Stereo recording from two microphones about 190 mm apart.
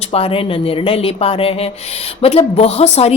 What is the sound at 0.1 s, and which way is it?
Speech, 30° left (ahead or behind).